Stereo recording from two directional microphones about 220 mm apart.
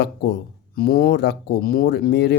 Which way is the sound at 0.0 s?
45° left (ahead or behind).